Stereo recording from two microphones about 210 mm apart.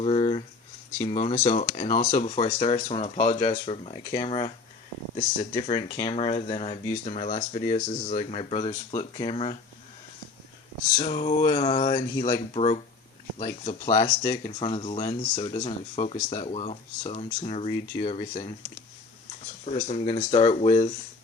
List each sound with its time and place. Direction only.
0.0 s a sound: 30° left (ahead or behind)
1.0 s speech: 30° left (ahead or behind)
10.9 s speech: 30° left (ahead or behind)
13.9 s speech: 15° left (ahead or behind)
19.6 s speech: 30° left (ahead or behind)